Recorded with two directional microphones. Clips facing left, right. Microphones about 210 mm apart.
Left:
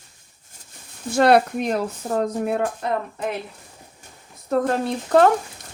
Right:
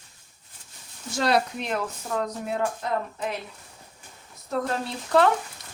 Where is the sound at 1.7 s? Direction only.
40° left (ahead or behind).